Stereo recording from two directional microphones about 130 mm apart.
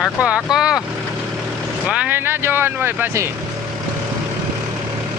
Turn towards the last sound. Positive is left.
turn(degrees=-15)  # may be behind; listen again after turning